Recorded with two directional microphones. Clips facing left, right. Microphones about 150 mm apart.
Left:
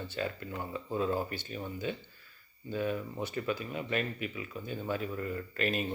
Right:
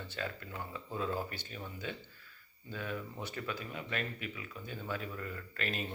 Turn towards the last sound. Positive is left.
turn(degrees=15)  # may be behind; listen again after turning